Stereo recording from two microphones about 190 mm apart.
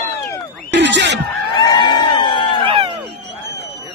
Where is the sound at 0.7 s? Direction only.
65° right (ahead or behind).